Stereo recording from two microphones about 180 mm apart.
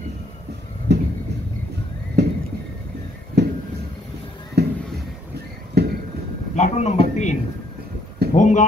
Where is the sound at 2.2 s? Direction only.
70° right (ahead or behind).